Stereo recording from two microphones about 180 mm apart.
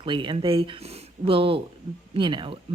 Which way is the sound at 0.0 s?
25° right (ahead or behind).